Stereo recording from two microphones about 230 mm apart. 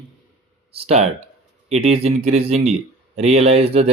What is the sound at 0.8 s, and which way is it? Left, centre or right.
Speech, right.